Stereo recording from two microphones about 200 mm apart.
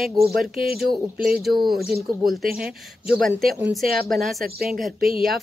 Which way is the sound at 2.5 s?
50° right (ahead or behind).